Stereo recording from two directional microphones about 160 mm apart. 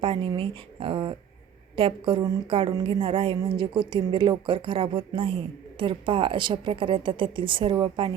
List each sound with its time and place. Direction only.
0.0 s speech: 35° right (ahead or behind)